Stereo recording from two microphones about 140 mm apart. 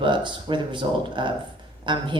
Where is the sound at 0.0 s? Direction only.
35° right (ahead or behind).